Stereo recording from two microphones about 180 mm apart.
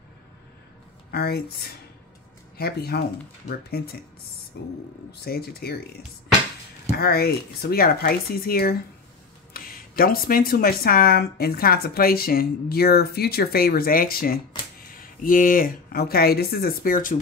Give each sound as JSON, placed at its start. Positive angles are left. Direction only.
{"t": 1.1, "sound": "speech", "side_deg": 65}
{"t": 7.0, "sound": "speech", "side_deg": 60}